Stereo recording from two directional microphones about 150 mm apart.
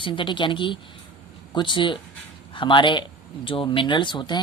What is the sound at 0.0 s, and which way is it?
A woman's voice, 35° left (ahead or behind).